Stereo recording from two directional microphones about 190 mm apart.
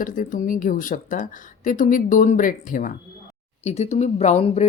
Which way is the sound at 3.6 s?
35° left (ahead or behind).